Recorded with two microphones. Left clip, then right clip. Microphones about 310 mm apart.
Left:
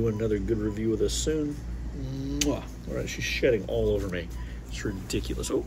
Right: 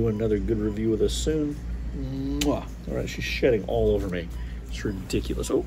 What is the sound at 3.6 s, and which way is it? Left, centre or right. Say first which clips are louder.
Speech: right 3 dB; centre.